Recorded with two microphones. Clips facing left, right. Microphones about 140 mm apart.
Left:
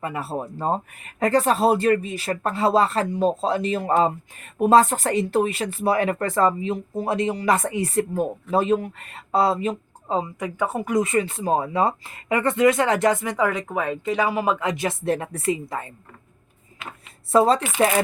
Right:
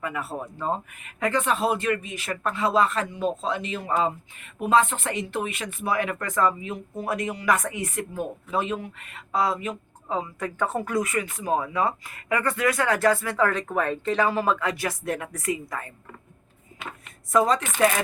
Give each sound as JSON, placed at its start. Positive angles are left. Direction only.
{"t": 0.0, "sound": "speech", "side_deg": 30}
{"t": 10.4, "sound": "speech", "side_deg": 10}
{"t": 11.0, "sound": "speech", "side_deg": 25}
{"t": 17.3, "sound": "speech", "side_deg": 30}